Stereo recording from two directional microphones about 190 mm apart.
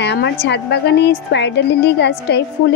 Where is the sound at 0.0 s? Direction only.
65° left (ahead or behind).